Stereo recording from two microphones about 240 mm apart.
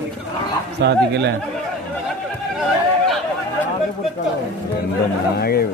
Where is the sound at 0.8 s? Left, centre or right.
Right.